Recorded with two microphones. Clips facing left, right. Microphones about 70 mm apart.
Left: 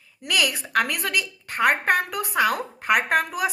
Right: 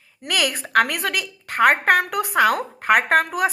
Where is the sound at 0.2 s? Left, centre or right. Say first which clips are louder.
Right 1 dB; right.